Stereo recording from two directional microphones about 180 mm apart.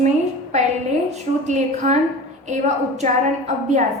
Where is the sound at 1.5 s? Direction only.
40° right (ahead or behind).